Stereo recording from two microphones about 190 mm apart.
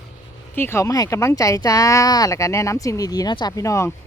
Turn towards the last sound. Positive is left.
turn(degrees=15)  # may be behind; listen again after turning